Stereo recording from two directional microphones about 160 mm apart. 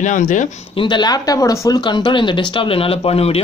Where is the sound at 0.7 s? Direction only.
30° left (ahead or behind).